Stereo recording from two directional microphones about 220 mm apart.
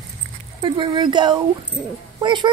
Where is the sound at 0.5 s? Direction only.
25° right (ahead or behind).